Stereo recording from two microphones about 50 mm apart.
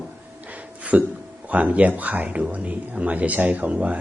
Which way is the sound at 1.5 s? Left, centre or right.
Right.